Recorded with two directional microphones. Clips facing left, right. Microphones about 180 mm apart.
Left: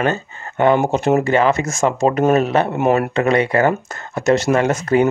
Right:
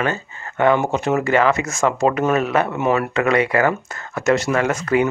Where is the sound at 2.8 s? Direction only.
50° left (ahead or behind).